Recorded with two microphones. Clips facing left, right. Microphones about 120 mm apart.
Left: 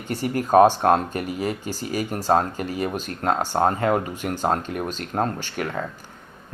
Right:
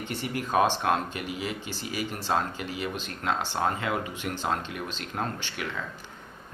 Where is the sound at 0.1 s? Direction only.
40° left (ahead or behind).